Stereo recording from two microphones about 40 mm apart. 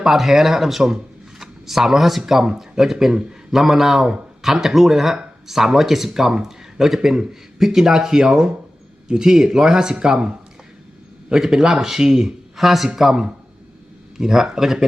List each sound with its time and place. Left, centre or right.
0.0 s speech: centre
12.5 s speech: centre